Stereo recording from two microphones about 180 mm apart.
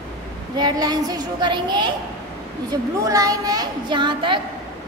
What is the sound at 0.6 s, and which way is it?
A woman's voice, 20° right (ahead or behind).